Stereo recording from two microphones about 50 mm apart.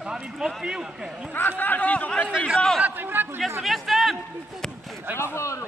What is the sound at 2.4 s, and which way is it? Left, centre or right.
Speech, centre.